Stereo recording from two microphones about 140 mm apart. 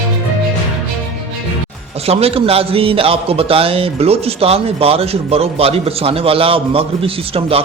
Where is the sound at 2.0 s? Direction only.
45° right (ahead or behind).